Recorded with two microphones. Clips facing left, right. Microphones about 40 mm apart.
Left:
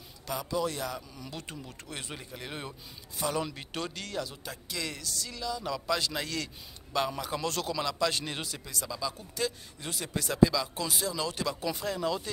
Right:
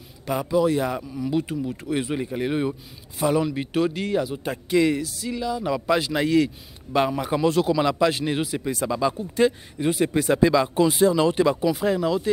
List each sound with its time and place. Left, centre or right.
0.3 s a man's voice: right
0.6 s speech: centre
2.0 s a man's voice: right
7.8 s a man's voice: right
8.1 s speech: centre
8.5 s speech: right
9.1 s a man's voice: right